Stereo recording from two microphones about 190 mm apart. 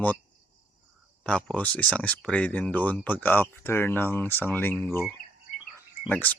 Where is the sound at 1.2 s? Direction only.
5° left (ahead or behind).